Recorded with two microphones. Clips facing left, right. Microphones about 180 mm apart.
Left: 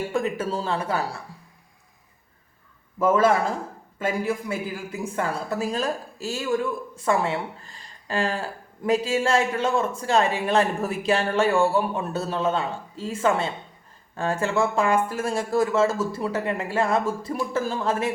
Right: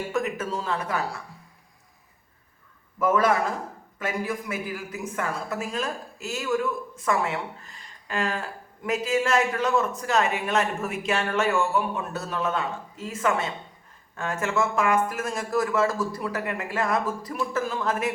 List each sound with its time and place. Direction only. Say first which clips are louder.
0.1 s speech: left 2 dB; 30° left (ahead or behind)
3.0 s a woman's voice: left 3 dB; 25° left (ahead or behind)